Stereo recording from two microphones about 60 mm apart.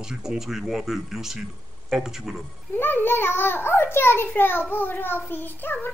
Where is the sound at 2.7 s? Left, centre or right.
Left.